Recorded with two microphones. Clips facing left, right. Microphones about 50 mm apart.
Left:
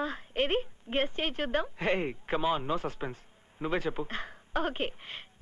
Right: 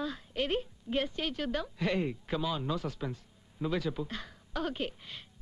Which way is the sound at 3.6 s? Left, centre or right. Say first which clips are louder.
Left 2 dB; left.